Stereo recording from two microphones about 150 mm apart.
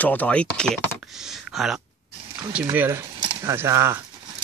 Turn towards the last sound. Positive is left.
turn(degrees=-20)  # may be behind; listen again after turning